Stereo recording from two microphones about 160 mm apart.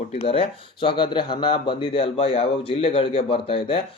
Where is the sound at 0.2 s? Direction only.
35° left (ahead or behind).